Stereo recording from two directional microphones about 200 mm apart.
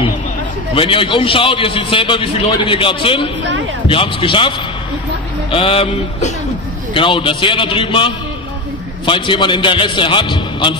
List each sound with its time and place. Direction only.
0.7 s a man's voice: 25° left (ahead or behind)